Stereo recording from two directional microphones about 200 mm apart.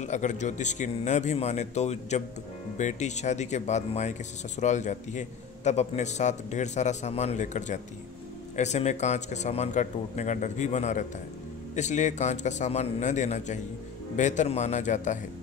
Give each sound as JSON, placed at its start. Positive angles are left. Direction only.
{"t": 0.0, "sound": "speech", "side_deg": 35}